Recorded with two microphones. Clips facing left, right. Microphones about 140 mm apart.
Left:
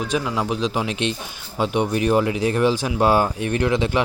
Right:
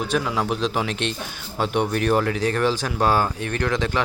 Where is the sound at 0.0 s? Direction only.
Centre (ahead or behind).